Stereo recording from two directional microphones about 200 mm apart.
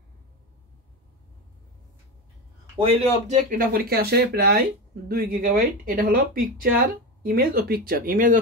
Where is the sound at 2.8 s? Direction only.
30° right (ahead or behind).